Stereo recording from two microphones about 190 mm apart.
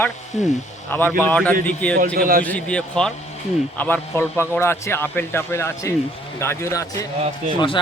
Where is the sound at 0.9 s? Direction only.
10° left (ahead or behind).